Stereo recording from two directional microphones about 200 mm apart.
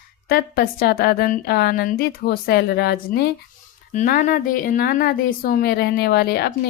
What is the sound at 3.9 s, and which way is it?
Speech, 40° left (ahead or behind).